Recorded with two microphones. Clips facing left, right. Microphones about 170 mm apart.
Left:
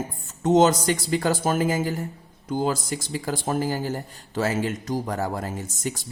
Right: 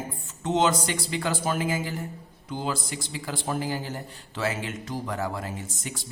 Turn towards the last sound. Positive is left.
turn(degrees=45)  # may be behind; listen again after turning